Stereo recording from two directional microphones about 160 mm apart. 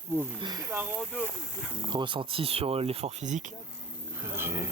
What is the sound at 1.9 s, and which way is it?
Speech, 30° right (ahead or behind).